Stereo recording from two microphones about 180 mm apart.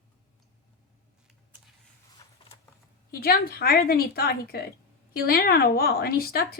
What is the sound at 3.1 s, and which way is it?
Speech, 55° left (ahead or behind).